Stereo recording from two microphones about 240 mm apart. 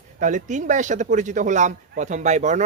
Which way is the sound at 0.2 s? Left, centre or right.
Right.